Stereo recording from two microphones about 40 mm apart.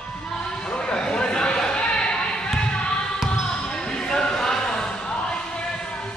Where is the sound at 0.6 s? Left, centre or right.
Left.